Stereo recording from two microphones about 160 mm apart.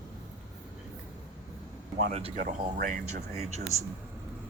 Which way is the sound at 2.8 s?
60° right (ahead or behind).